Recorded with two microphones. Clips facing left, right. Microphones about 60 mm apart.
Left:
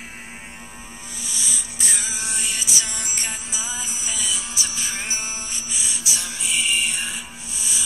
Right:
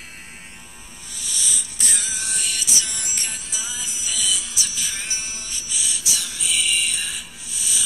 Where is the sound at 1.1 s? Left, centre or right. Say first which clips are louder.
Right 1 dB; centre.